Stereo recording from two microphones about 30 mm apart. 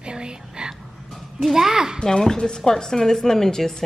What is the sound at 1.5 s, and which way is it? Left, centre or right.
Speech, centre.